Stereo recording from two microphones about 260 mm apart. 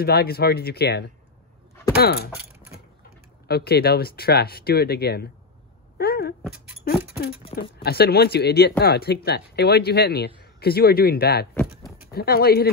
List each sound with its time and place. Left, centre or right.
0.0 s speech: left
3.4 s speech: left
5.9 s a sound: left
7.8 s speech: left